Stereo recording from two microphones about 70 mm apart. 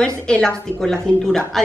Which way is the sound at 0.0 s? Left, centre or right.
Centre.